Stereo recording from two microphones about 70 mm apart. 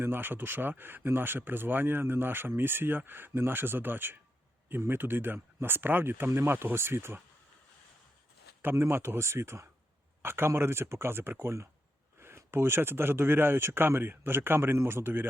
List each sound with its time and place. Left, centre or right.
0.0 s speech: right
8.6 s speech: right